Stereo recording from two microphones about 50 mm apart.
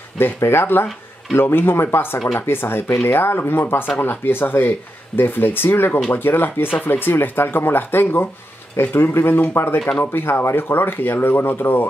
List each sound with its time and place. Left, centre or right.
0.2 s speech: left